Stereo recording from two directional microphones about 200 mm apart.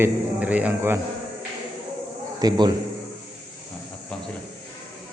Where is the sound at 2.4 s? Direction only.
20° right (ahead or behind).